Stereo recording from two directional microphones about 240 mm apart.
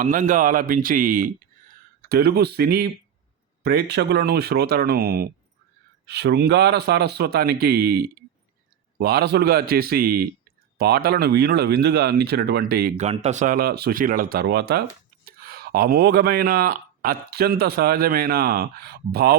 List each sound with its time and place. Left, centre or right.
0.0 s speech: right